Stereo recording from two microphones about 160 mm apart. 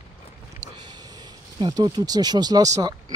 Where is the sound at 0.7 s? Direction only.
25° right (ahead or behind).